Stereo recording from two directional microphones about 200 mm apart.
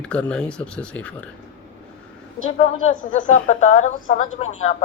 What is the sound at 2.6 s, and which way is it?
A woman's voice, 35° left (ahead or behind).